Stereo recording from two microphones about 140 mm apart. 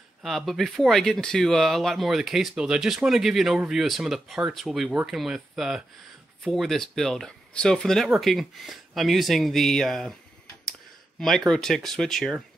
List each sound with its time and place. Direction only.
0.2 s speech: centre (ahead or behind)
11.1 s speech: 5° left (ahead or behind)